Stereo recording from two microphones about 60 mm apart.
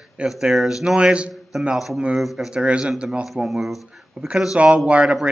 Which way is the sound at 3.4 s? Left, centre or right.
Centre.